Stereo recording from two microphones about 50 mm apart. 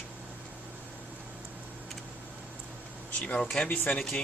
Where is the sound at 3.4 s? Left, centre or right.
Centre.